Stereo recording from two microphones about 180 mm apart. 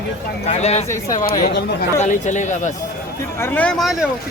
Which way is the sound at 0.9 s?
20° left (ahead or behind).